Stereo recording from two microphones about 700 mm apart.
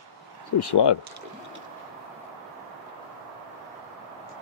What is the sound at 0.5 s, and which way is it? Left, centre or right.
Speech, left.